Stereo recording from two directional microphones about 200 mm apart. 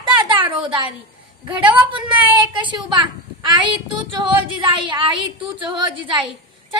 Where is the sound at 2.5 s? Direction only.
25° right (ahead or behind).